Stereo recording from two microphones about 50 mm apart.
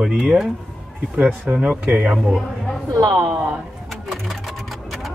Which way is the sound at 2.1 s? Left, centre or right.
Centre.